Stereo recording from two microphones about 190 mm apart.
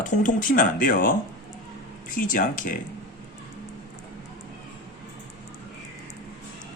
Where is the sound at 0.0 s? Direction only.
45° left (ahead or behind).